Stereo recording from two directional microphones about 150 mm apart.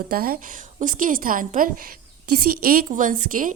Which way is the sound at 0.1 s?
75° right (ahead or behind).